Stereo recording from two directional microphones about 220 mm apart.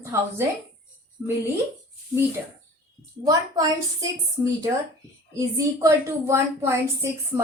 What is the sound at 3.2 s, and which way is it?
A woman's voice, 15° right (ahead or behind).